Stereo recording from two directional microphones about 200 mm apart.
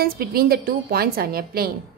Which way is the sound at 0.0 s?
50° right (ahead or behind).